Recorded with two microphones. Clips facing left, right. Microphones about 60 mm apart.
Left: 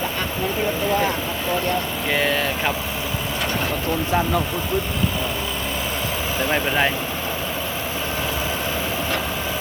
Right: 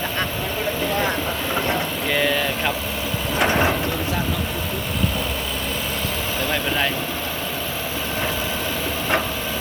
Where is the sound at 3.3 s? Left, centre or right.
Right.